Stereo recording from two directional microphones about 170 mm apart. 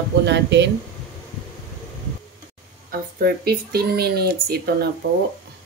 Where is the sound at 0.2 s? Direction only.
90° right.